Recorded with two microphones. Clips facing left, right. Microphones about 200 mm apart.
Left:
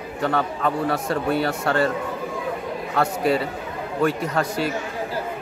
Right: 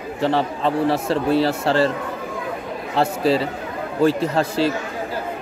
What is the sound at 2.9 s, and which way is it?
A man's voice, 30° right (ahead or behind).